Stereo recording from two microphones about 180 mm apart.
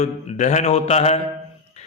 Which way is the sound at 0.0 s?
40° left (ahead or behind).